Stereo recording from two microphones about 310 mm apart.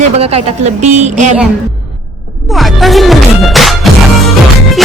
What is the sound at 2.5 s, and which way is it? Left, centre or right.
Music, centre.